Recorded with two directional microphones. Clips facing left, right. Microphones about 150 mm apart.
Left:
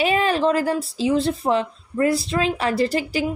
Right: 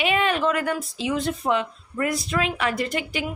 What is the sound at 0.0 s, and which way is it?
A woman's voice, 35° left (ahead or behind).